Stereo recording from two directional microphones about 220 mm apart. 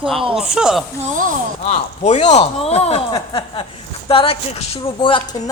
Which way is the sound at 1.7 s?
30° left (ahead or behind).